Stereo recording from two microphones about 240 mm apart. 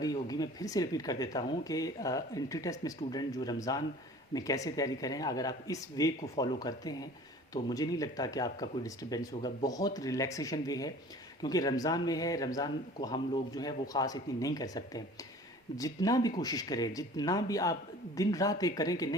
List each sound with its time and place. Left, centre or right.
0.0 s speech: centre